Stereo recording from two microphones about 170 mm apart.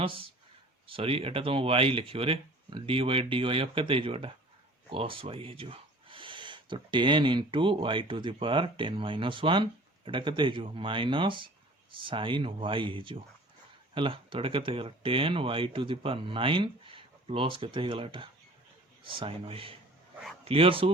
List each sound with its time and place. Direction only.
0.0 s speech: 30° right (ahead or behind)